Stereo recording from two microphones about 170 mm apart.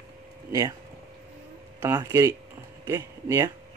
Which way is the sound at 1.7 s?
15° right (ahead or behind).